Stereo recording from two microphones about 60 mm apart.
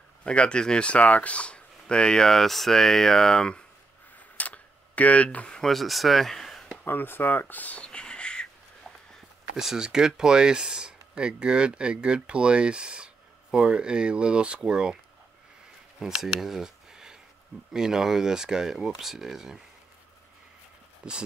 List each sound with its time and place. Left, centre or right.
0.2 s speech: centre
4.4 s tick-tock: left
5.6 s speech: centre
6.8 s speech: left; by 8.5 s centre
9.6 s speech: centre
16.0 s speech: centre
21.0 s a sound: centre